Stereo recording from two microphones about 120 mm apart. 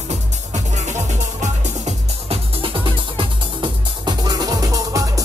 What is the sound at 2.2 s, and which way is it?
Music, 50° right (ahead or behind).